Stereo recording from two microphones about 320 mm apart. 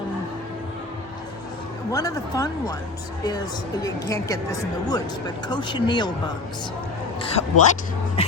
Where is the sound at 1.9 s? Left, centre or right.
Centre.